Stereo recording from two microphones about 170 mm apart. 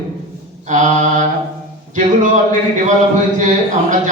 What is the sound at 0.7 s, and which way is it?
Speech, 45° right (ahead or behind).